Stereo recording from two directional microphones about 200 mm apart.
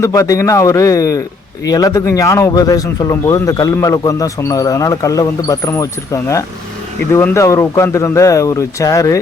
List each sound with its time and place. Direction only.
0.0 s speech: 15° left (ahead or behind)